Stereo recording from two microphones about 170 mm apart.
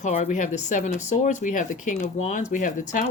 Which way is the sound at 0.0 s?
45° left (ahead or behind).